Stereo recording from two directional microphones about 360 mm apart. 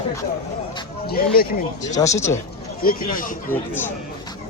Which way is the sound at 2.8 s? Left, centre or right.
Left.